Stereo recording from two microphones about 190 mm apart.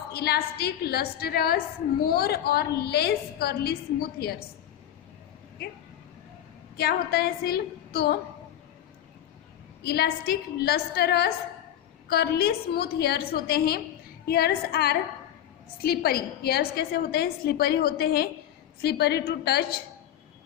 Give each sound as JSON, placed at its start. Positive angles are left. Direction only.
{"t": 0.1, "sound": "a woman's voice", "side_deg": 55}
{"t": 6.7, "sound": "a woman's voice", "side_deg": 55}
{"t": 9.8, "sound": "a woman's voice", "side_deg": 55}